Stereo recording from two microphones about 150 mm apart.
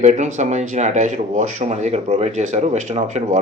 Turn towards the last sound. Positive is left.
turn(degrees=-50)  # may be behind; listen again after turning